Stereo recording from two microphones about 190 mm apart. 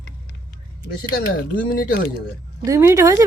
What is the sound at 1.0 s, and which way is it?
Speech, 55° left (ahead or behind).